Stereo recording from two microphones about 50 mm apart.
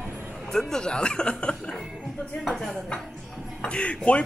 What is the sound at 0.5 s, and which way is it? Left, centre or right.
Speech, centre.